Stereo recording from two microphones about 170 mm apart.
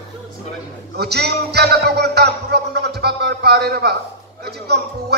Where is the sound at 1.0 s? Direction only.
75° right (ahead or behind).